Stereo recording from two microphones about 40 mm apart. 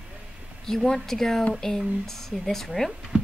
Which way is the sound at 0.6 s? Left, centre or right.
Centre.